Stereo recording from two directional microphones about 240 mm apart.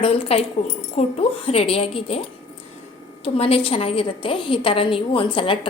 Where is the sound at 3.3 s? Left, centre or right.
Left.